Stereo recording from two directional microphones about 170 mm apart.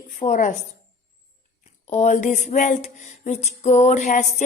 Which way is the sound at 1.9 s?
40° left (ahead or behind).